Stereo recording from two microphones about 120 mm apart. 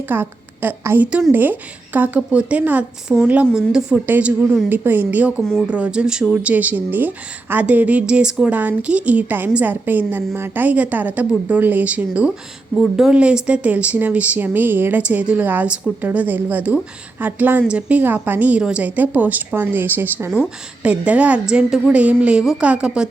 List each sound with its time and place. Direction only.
0.1 s speech: 15° right (ahead or behind)
5.4 s speech: 5° left (ahead or behind)
5.6 s speech: 10° right (ahead or behind)
12.7 s speech: centre (ahead or behind)